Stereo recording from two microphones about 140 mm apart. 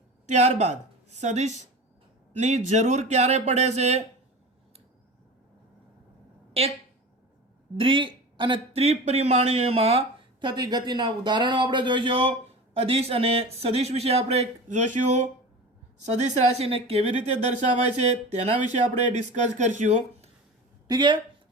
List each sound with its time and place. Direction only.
0.3 s speech: 55° right (ahead or behind)
7.8 s a man's voice: 40° right (ahead or behind)
10.4 s a man's voice: 30° right (ahead or behind); by 20.3 s 60° right (ahead or behind)
20.8 s speech: 30° right (ahead or behind)